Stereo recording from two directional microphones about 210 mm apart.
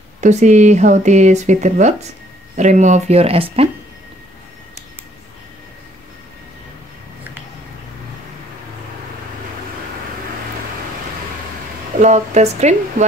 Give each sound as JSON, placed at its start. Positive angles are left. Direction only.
{"t": 0.2, "sound": "speech", "side_deg": -35}
{"t": 12.0, "sound": "speech", "side_deg": -35}